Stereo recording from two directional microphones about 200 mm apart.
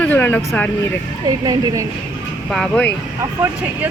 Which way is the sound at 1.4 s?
20° right (ahead or behind).